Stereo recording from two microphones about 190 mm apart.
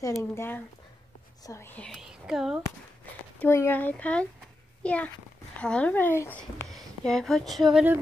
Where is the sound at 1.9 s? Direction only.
5° right (ahead or behind).